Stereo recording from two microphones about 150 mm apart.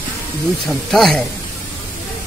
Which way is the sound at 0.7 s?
Centre (ahead or behind).